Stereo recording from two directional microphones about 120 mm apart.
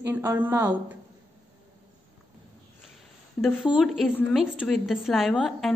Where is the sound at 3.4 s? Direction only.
5° right (ahead or behind).